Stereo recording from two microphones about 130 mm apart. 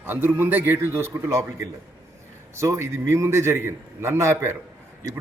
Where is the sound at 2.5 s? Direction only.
20° right (ahead or behind).